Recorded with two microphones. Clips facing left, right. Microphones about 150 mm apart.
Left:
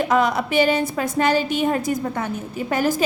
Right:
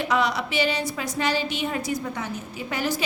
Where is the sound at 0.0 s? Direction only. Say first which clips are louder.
Left 5 dB; 45° left (ahead or behind).